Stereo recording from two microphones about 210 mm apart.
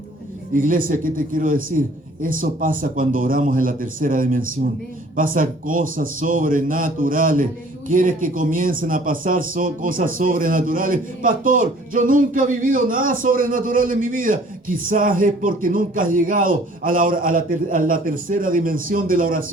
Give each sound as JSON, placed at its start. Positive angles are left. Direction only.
{"t": 0.5, "sound": "speech", "side_deg": -40}